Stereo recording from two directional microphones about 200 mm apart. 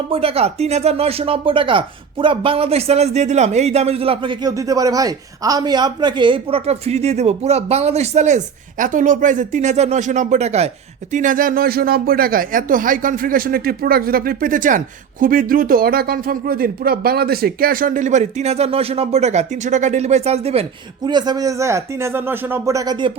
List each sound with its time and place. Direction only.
0.1 s speech: 30° right (ahead or behind)